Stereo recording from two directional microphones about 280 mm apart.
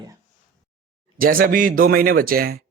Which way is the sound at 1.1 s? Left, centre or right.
Right.